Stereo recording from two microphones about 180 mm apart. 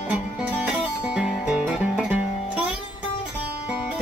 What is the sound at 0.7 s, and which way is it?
Music, 5° right (ahead or behind).